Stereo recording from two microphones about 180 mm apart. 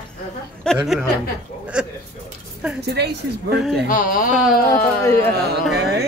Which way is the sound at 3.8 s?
50° left (ahead or behind).